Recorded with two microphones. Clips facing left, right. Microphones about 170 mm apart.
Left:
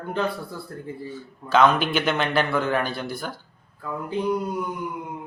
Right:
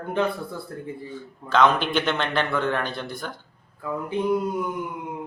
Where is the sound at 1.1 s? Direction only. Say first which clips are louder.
Left 2 dB; 5° left (ahead or behind).